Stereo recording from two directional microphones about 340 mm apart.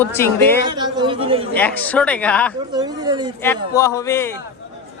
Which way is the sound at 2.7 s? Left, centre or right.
Centre.